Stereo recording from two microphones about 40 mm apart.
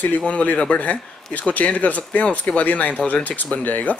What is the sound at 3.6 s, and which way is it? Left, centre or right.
Speech, left.